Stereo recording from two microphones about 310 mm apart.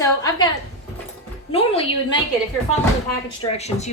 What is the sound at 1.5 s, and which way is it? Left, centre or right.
Speech, centre.